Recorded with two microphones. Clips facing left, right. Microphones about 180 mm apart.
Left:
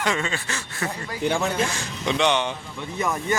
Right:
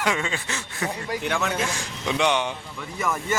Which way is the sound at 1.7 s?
10° right (ahead or behind).